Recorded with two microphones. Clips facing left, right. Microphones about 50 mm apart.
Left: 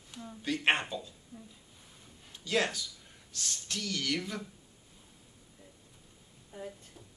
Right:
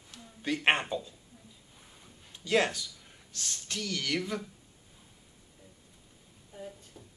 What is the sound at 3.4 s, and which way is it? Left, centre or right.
Speech, right.